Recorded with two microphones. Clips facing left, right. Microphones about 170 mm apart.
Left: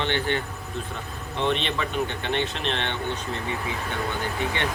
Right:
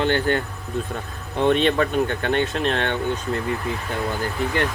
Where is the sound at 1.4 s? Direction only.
45° right (ahead or behind).